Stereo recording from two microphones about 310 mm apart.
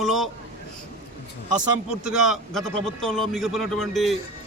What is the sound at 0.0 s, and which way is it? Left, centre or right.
Speech, centre.